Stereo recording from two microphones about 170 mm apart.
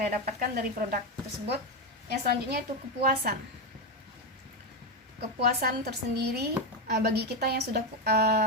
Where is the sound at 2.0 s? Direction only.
65° right (ahead or behind).